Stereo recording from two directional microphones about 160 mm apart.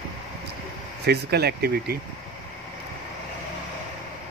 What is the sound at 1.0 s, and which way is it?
Speech, 90° right.